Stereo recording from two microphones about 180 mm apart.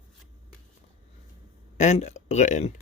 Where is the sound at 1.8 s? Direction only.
40° left (ahead or behind).